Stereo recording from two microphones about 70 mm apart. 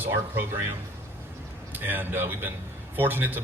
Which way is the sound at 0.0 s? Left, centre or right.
Right.